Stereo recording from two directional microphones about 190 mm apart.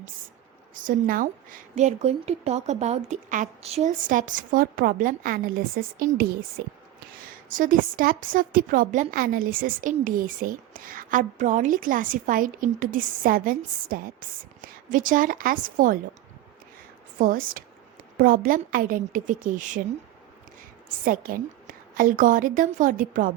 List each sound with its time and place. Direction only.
0.7 s a woman's voice: 45° right (ahead or behind)
7.5 s a woman's voice: 45° right (ahead or behind)
17.2 s a woman's voice: 50° right (ahead or behind)
21.0 s a woman's voice: 50° right (ahead or behind)